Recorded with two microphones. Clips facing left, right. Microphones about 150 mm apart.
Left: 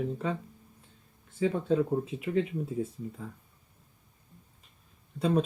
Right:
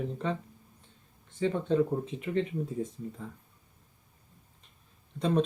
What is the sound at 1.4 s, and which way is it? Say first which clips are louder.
Speech: even; 5° left (ahead or behind).